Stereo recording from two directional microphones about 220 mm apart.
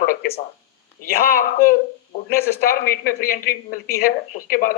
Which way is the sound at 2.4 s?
45° left (ahead or behind).